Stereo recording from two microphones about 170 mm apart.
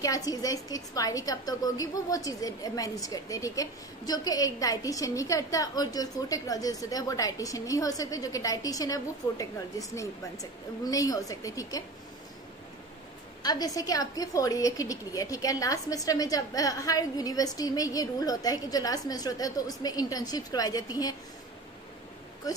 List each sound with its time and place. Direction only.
0.0 s a woman's voice: 20° left (ahead or behind)
13.4 s a woman's voice: 20° left (ahead or behind)